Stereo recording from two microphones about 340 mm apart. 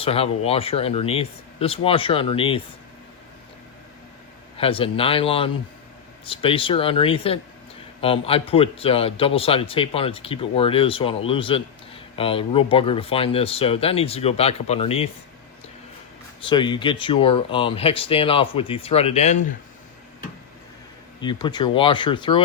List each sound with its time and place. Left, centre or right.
0.0 s a man's voice: centre
4.5 s a man's voice: centre
16.4 s a man's voice: centre
21.2 s a man's voice: centre